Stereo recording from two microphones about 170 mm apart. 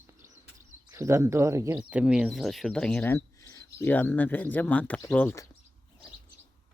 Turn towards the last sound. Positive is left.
turn(degrees=10)  # may be behind; listen again after turning